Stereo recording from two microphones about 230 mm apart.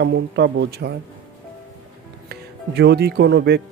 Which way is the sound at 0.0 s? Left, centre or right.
Right.